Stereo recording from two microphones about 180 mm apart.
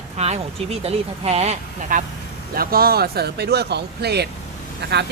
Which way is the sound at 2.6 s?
55° right (ahead or behind).